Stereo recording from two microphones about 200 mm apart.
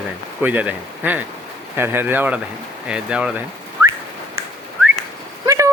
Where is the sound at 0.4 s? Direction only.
10° right (ahead or behind).